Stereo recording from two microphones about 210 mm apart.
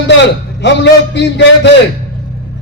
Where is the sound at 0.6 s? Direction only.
55° left (ahead or behind).